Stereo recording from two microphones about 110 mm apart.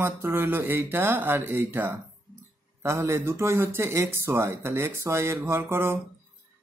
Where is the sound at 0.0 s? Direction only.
20° right (ahead or behind).